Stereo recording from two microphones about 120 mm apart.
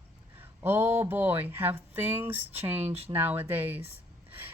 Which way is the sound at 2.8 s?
60° right (ahead or behind).